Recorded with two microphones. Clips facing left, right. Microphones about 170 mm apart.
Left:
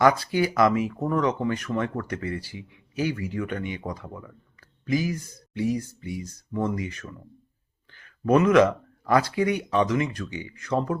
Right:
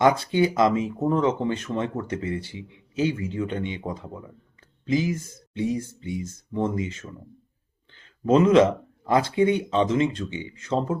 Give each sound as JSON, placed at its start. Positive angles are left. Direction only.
{"t": 0.0, "sound": "speech", "side_deg": -25}